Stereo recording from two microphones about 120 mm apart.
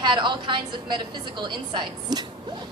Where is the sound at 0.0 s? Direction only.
40° right (ahead or behind).